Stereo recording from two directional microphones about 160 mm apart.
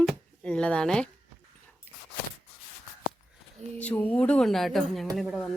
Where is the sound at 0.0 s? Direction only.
5° left (ahead or behind).